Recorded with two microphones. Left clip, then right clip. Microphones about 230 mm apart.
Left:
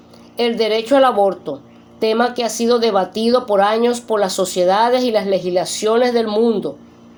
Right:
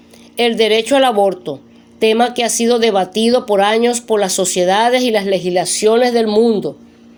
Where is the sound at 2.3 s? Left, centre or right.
Right.